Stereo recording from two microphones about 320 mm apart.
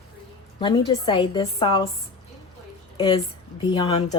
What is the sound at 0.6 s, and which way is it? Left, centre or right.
A woman's voice, centre.